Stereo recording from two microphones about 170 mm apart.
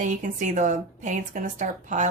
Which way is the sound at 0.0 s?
50° right (ahead or behind).